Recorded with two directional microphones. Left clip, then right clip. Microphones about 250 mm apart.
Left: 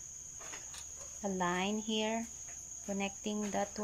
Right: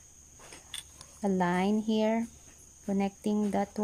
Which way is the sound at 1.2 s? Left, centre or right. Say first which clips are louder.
Right 6 dB; right.